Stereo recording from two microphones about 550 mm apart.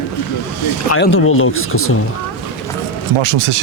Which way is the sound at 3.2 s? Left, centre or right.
Right.